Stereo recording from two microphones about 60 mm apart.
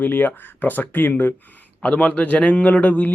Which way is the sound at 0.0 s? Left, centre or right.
Left.